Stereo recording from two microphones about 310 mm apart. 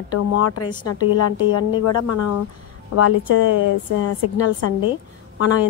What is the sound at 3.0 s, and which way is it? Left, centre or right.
Speech, left.